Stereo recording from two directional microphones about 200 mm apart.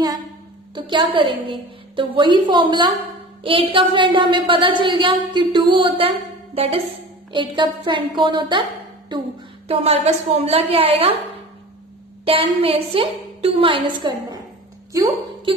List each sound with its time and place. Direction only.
0.7 s a woman's voice: 25° right (ahead or behind)
12.3 s a woman's voice: 30° right (ahead or behind)